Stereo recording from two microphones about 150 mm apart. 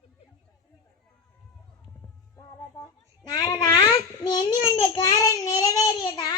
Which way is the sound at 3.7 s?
30° left (ahead or behind).